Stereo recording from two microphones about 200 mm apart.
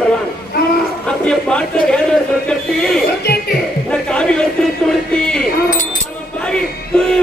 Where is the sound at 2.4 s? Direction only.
5° left (ahead or behind).